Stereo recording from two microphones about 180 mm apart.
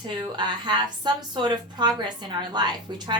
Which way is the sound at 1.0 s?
25° right (ahead or behind).